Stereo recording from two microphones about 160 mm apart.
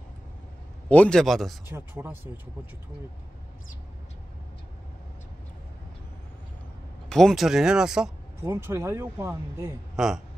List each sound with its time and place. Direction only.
0.8 s speech: 10° left (ahead or behind)
1.7 s speech: 15° right (ahead or behind)
7.1 s speech: 5° left (ahead or behind)
8.5 s speech: 15° right (ahead or behind)
9.9 s speech: 5° right (ahead or behind)